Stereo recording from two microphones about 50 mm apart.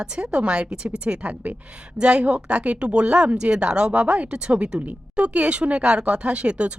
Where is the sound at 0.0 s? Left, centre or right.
Centre.